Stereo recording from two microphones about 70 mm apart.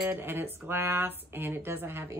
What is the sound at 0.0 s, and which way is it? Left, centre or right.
Speech, right.